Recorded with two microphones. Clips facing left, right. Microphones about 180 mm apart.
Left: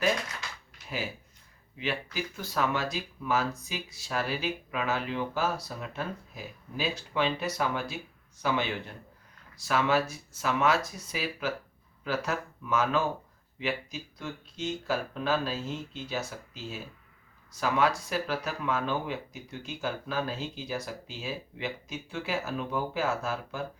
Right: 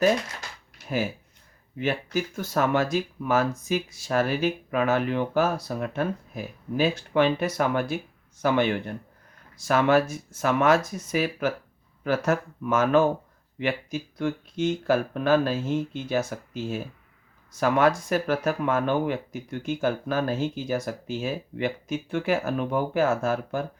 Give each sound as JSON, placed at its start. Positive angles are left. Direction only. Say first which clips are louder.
{"t": 1.8, "sound": "speech", "louder": "right 7 dB", "side_deg": -50}